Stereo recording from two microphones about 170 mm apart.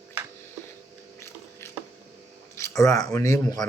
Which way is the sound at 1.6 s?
15° left (ahead or behind).